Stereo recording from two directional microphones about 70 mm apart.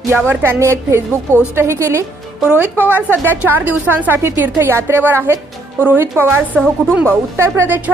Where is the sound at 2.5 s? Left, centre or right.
Right.